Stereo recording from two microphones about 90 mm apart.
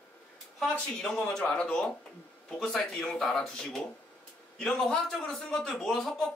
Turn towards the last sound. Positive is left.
turn(degrees=5)  # may be behind; listen again after turning